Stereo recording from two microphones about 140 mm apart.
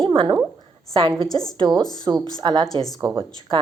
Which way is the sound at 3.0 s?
25° right (ahead or behind).